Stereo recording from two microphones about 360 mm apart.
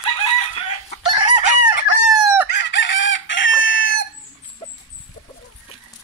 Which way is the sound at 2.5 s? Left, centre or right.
Left.